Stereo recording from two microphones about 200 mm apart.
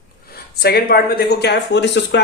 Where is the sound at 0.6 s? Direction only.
50° left (ahead or behind).